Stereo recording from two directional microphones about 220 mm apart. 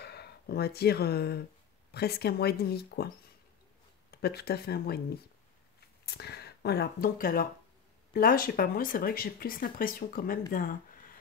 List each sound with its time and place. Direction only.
0.0 s speech: 45° left (ahead or behind)
4.1 s speech: 45° left (ahead or behind)